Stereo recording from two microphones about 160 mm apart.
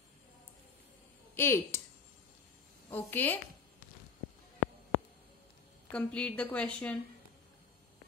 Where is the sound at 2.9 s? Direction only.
10° left (ahead or behind).